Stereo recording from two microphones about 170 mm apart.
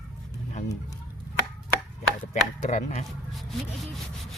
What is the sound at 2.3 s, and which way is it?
Speech, 45° left (ahead or behind).